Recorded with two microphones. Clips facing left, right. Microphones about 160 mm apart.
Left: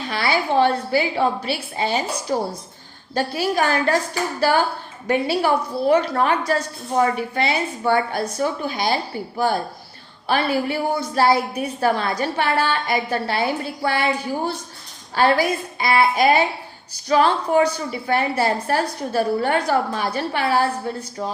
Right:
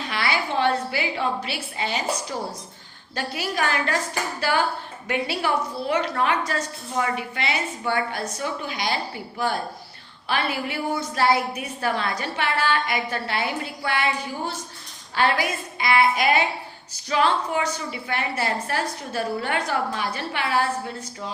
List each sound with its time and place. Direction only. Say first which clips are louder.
0.1 s a woman's voice: left 6 dB; 35° left (ahead or behind)
15.1 s a woman's voice: left 5 dB; 35° left (ahead or behind)